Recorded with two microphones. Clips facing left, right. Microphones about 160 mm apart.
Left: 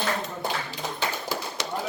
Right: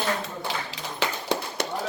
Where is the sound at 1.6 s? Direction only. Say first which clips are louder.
Right 3 dB; 55° right (ahead or behind).